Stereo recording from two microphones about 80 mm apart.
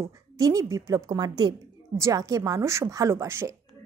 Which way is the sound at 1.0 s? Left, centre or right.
Right.